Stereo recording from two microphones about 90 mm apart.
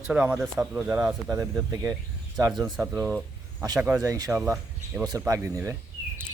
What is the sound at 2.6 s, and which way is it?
Speech, 25° right (ahead or behind).